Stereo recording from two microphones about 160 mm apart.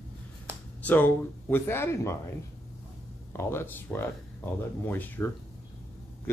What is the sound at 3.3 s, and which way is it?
Speech, 15° left (ahead or behind).